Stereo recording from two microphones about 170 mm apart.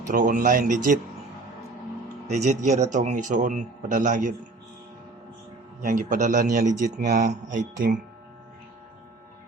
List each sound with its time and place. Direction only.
0.1 s speech: 50° right (ahead or behind)
2.2 s speech: 45° right (ahead or behind)
5.8 s speech: 50° right (ahead or behind)